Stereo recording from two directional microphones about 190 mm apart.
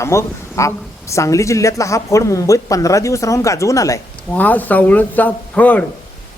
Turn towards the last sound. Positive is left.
turn(degrees=10)  # may be behind; listen again after turning